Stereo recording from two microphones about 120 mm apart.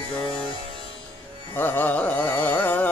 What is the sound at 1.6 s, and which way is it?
Carnatic music, 15° left (ahead or behind).